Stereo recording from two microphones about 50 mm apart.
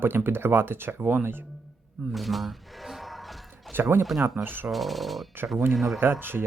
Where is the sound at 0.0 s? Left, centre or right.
Right.